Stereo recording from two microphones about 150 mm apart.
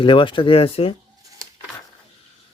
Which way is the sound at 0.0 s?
35° left (ahead or behind).